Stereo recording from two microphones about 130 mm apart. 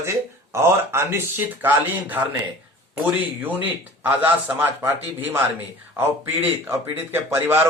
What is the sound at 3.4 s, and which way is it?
Speech, 15° right (ahead or behind).